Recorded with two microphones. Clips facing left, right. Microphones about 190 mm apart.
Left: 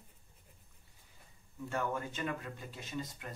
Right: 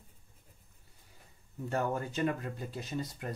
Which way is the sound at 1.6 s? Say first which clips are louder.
Right 4 dB; 40° right (ahead or behind).